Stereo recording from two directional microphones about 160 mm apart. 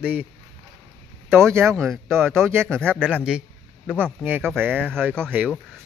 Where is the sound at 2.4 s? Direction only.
15° right (ahead or behind).